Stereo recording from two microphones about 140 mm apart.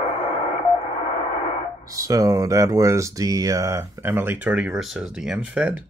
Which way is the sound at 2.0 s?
25° right (ahead or behind).